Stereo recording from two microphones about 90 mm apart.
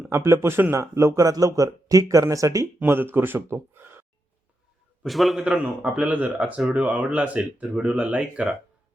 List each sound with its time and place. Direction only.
0.1 s a man's voice: 30° right (ahead or behind)
2.7 s speech: 25° right (ahead or behind)
5.0 s a man's voice: centre (ahead or behind)
5.5 s speech: 15° right (ahead or behind)